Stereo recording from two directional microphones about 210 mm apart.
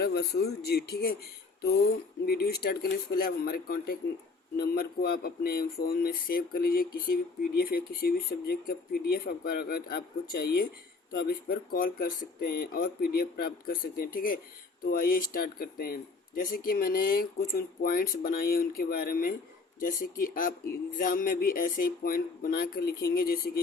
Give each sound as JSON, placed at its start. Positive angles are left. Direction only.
{"t": 0.0, "sound": "speech", "side_deg": 50}
{"t": 2.2, "sound": "speech", "side_deg": 50}